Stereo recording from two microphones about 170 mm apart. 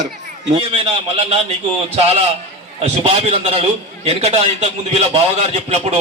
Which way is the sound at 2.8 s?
35° right (ahead or behind).